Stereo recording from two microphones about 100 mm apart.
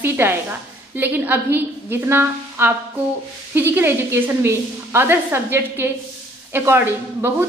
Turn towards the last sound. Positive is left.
turn(degrees=-25)  # may be behind; listen again after turning